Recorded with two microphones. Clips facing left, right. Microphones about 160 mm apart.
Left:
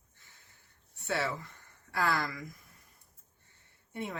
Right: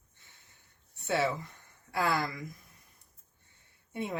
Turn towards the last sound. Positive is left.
turn(degrees=-20)  # may be behind; listen again after turning